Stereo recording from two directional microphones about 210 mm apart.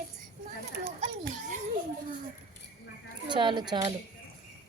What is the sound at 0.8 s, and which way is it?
Speech, 40° right (ahead or behind).